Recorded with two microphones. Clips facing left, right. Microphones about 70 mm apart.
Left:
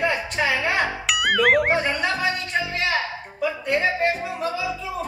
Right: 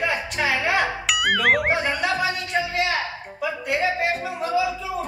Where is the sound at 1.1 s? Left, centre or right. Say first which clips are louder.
Left 2 dB; centre.